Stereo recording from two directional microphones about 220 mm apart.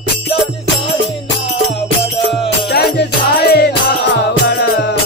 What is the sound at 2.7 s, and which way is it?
Music, 50° left (ahead or behind).